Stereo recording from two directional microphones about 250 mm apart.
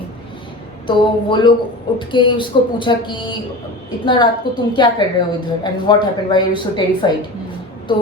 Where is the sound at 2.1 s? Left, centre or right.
Centre.